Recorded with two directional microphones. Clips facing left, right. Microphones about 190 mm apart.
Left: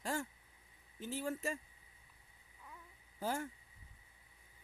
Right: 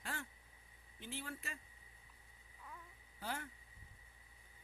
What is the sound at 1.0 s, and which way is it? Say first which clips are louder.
Speech: left 9 dB; 40° left (ahead or behind).